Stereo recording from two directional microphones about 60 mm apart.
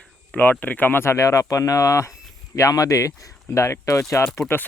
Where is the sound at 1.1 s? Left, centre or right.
Left.